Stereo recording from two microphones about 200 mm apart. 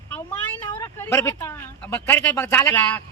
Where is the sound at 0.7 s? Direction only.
10° left (ahead or behind).